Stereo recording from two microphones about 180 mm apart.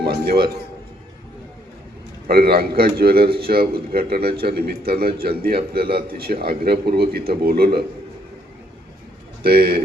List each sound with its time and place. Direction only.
0.1 s a man's voice: 55° right (ahead or behind)
2.2 s a man's voice: 55° right (ahead or behind)
9.4 s a man's voice: 55° right (ahead or behind)